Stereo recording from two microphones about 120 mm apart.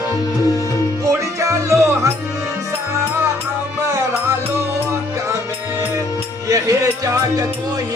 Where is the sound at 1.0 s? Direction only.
25° right (ahead or behind).